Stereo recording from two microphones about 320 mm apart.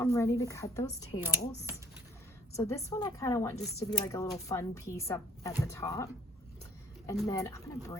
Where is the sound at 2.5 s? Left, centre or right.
Centre.